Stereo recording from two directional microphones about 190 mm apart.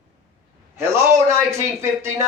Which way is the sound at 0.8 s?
15° right (ahead or behind).